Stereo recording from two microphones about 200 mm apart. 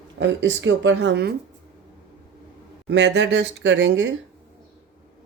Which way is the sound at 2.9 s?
60° right (ahead or behind).